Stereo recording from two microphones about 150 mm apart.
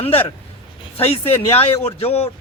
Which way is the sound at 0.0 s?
40° left (ahead or behind).